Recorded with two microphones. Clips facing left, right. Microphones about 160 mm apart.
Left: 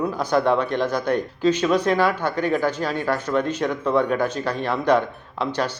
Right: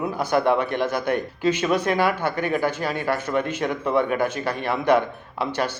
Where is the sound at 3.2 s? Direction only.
55° right (ahead or behind).